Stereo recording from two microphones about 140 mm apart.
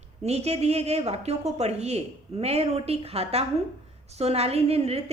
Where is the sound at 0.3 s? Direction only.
50° right (ahead or behind).